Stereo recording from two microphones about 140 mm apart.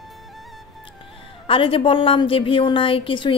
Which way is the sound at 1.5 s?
40° left (ahead or behind).